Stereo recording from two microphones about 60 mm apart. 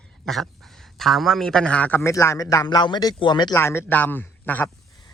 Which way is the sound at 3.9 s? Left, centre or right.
Left.